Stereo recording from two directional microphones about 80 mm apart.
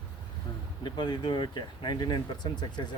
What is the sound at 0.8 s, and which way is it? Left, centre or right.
Speech, left.